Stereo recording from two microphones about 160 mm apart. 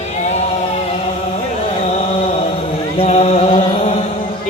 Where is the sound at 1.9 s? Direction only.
45° left (ahead or behind).